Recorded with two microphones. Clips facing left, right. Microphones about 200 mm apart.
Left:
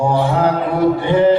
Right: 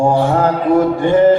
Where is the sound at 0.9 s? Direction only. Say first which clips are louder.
Right 2 dB; 45° right (ahead or behind).